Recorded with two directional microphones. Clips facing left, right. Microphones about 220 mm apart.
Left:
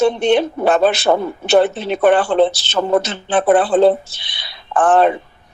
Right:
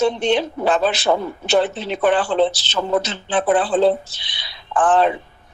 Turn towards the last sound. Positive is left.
turn(degrees=60)  # may be behind; listen again after turning